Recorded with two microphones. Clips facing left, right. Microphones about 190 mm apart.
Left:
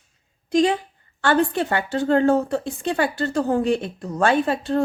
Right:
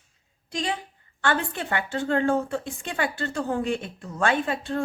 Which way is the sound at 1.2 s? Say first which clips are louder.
Left 7 dB; 35° left (ahead or behind).